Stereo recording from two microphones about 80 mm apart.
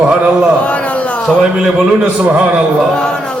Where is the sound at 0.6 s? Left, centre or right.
Centre.